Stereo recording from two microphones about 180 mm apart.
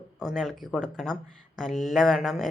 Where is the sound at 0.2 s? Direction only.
Centre (ahead or behind).